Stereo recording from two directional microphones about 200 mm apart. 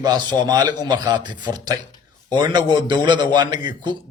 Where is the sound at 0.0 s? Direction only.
20° right (ahead or behind).